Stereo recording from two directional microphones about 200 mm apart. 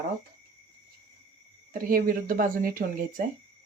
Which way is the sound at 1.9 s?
45° right (ahead or behind).